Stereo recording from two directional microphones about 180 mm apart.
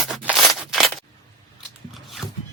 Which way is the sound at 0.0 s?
5° right (ahead or behind).